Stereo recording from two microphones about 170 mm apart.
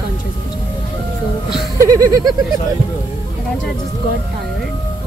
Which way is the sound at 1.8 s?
20° right (ahead or behind).